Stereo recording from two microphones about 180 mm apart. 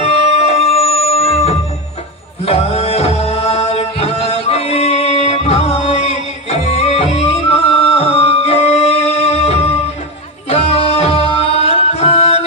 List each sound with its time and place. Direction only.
0.0 s music: 35° left (ahead or behind)